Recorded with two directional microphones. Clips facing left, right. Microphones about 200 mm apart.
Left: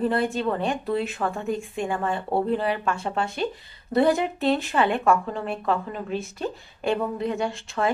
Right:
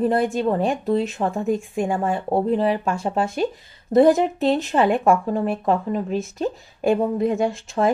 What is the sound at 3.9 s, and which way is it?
Speech, 45° right (ahead or behind).